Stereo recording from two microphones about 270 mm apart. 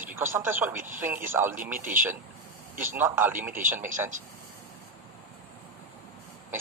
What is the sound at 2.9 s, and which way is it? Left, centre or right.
Speech, centre.